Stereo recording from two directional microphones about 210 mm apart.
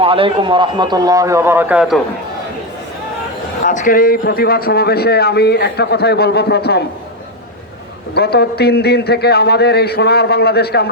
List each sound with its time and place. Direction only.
0.0 s a man's voice: 25° right (ahead or behind); by 2.0 s 5° right (ahead or behind)
3.6 s a man's voice: 40° left (ahead or behind)
8.1 s a man's voice: 50° left (ahead or behind)